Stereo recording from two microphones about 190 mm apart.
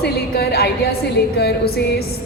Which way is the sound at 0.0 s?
60° left (ahead or behind).